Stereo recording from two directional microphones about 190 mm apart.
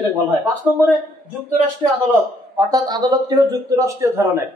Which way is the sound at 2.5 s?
20° right (ahead or behind).